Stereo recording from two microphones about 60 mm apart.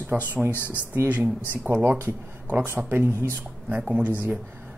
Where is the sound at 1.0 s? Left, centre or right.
Right.